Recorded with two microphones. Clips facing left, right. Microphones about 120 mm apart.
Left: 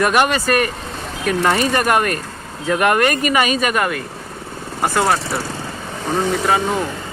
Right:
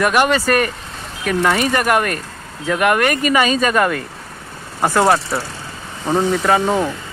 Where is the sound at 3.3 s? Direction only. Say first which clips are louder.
Right 2 dB; 15° left (ahead or behind).